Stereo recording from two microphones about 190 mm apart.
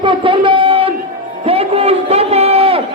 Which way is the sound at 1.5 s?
30° right (ahead or behind).